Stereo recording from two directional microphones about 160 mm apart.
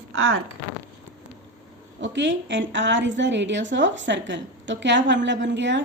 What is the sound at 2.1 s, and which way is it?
A woman's voice, 90° right.